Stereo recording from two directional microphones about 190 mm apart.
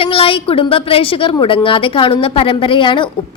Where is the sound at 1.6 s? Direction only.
25° left (ahead or behind).